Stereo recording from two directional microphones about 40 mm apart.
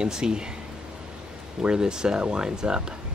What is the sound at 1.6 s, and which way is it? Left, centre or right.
Speech, centre.